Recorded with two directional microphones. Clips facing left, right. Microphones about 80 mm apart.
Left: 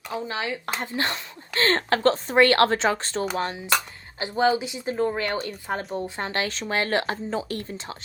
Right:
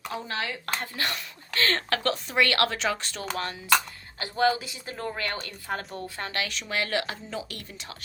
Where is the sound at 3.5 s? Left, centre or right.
Left.